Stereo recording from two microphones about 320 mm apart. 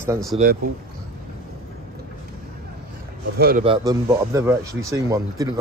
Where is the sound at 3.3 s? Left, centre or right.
Right.